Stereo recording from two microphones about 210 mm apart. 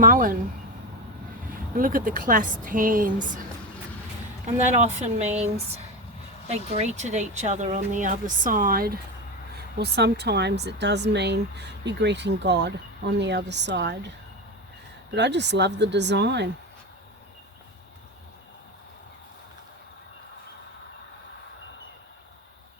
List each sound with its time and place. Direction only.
0.0 s speech: 40° right (ahead or behind)
1.7 s speech: 40° right (ahead or behind)
4.5 s speech: 35° right (ahead or behind); by 13.9 s 55° right (ahead or behind)
15.1 s speech: 55° right (ahead or behind)